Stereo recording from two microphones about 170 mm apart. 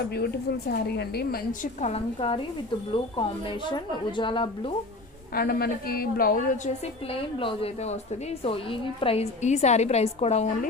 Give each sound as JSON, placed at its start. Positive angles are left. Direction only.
{"t": 0.7, "sound": "a woman's voice", "side_deg": 70}
{"t": 1.6, "sound": "a woman's voice", "side_deg": 40}
{"t": 4.2, "sound": "a woman's voice", "side_deg": 30}
{"t": 5.3, "sound": "a woman's voice", "side_deg": 65}
{"t": 7.1, "sound": "a woman's voice", "side_deg": 30}